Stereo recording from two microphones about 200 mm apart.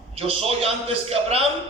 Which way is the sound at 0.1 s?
30° right (ahead or behind).